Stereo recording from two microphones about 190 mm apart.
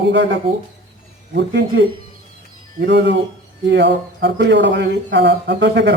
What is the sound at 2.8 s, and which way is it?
Speech, 65° right (ahead or behind).